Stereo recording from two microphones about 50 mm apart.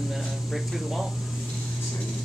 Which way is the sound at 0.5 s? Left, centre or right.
Centre.